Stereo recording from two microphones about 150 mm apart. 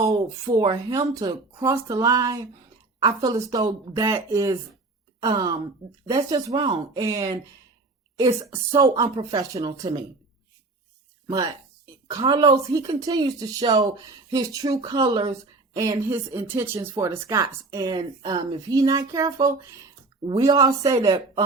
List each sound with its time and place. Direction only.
0.0 s speech: 25° right (ahead or behind)
12.1 s speech: 25° right (ahead or behind)